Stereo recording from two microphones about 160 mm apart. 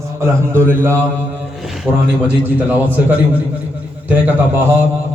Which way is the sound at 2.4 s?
10° right (ahead or behind).